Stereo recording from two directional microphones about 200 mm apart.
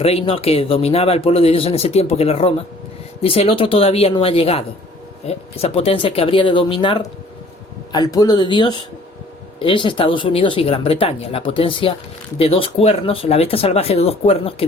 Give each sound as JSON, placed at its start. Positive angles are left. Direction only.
{"t": 0.0, "sound": "speech", "side_deg": 30}